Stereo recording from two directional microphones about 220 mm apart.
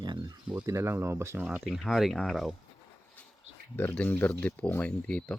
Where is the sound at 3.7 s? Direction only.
10° left (ahead or behind).